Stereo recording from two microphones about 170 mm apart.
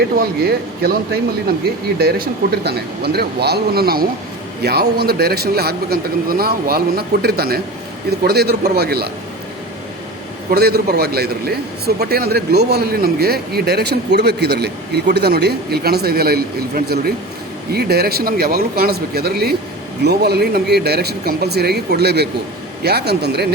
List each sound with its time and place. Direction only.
0.2 s a man's voice: 65° right (ahead or behind)
10.5 s a man's voice: 65° right (ahead or behind)